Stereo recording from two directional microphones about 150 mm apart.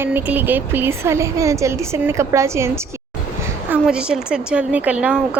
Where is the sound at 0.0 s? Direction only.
10° right (ahead or behind).